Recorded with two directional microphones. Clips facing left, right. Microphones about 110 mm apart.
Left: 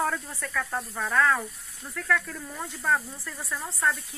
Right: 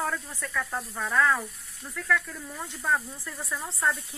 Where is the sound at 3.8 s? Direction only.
25° right (ahead or behind).